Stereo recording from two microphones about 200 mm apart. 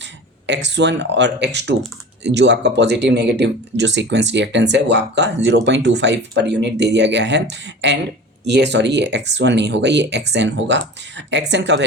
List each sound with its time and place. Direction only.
0.4 s speech: 60° right (ahead or behind)